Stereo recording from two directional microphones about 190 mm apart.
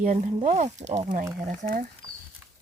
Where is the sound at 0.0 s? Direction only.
40° right (ahead or behind).